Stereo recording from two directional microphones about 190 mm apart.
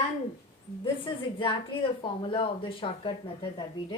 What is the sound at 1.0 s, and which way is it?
A woman's voice, 25° left (ahead or behind).